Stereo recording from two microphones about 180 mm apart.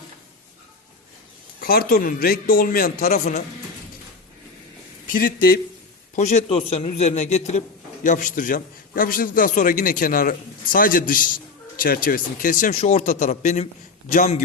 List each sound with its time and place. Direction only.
1.6 s a man's voice: 55° left (ahead or behind)
3.1 s a man's voice: 40° left (ahead or behind)
5.1 s a man's voice: 55° left (ahead or behind)
6.1 s a man's voice: 40° left (ahead or behind)